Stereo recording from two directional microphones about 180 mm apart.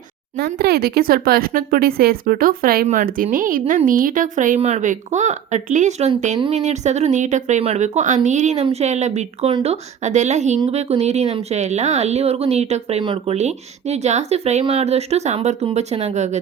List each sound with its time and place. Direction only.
0.3 s a woman's voice: 60° right (ahead or behind); by 16.4 s 40° right (ahead or behind)